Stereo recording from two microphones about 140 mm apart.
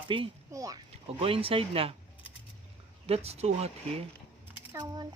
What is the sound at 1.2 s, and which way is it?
Speech, 40° right (ahead or behind).